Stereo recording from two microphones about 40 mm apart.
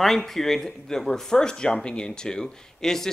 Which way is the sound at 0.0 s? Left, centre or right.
Centre.